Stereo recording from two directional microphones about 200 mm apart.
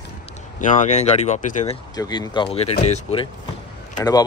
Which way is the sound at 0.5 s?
40° left (ahead or behind).